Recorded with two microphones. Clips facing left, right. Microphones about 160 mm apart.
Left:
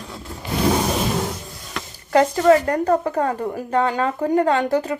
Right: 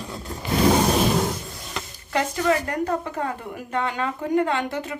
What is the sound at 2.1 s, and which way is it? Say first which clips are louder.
A woman's voice: left 8 dB; 40° left (ahead or behind).